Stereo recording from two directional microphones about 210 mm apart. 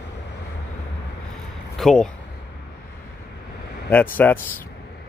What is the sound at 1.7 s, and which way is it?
Speech, centre (ahead or behind).